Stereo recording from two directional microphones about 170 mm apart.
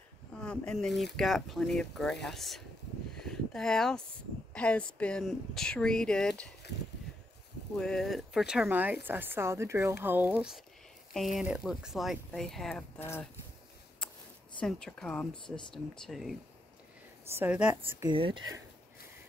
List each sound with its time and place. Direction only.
0.4 s speech: 5° left (ahead or behind)
3.2 s a sound: 5° left (ahead or behind)
4.6 s speech: 5° left (ahead or behind)
7.7 s speech: 5° left (ahead or behind)
14.6 s speech: 5° left (ahead or behind)
18.0 s speech: 30° right (ahead or behind)